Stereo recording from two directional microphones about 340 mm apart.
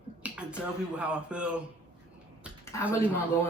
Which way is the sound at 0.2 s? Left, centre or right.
Centre.